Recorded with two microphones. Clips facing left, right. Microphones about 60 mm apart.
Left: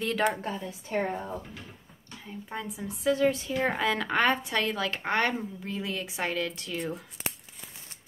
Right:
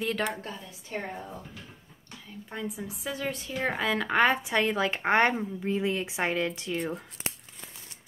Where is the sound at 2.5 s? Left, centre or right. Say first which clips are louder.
Right 1 dB; centre.